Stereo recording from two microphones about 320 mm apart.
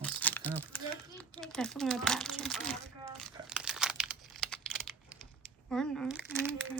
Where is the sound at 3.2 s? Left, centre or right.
Centre.